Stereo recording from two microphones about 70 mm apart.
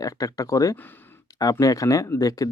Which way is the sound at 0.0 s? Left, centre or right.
Left.